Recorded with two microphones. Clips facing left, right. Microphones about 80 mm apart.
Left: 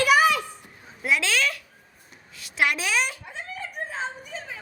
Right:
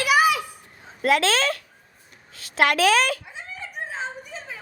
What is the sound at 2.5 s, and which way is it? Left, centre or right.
Speech, right.